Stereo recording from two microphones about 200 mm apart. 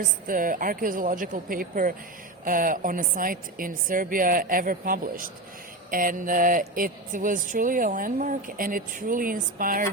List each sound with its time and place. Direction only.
0.3 s speech: 45° right (ahead or behind)